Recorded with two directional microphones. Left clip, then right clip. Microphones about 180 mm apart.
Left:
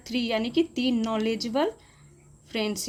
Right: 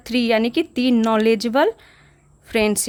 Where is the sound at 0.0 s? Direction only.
45° right (ahead or behind).